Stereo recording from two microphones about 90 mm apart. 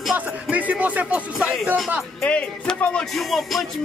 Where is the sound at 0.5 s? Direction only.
15° right (ahead or behind).